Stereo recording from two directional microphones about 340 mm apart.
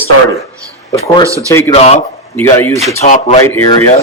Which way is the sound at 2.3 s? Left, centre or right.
Centre.